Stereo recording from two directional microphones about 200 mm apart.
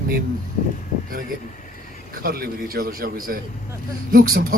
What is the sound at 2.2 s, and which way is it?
Speech, 45° right (ahead or behind).